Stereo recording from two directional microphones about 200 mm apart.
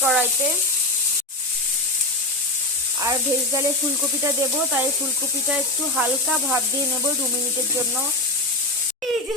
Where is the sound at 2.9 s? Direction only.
15° right (ahead or behind).